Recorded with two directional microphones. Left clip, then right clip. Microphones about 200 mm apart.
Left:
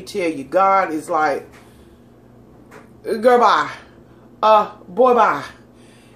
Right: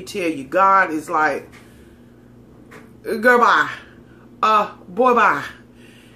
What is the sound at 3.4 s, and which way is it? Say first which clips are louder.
Speech: even; 25° right (ahead or behind).